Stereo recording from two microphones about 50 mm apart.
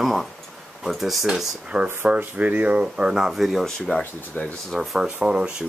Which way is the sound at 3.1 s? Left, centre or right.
Centre.